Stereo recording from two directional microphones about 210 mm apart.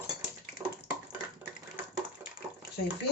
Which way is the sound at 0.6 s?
10° right (ahead or behind).